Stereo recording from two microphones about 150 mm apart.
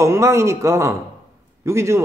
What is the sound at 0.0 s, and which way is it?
Speech, 20° right (ahead or behind).